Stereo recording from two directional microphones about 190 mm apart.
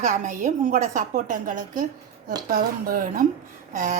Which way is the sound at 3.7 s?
40° right (ahead or behind).